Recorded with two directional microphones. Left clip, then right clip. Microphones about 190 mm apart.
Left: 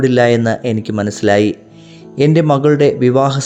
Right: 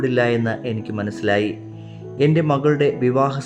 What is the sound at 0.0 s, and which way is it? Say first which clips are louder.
Speech: left 7 dB; 35° left (ahead or behind).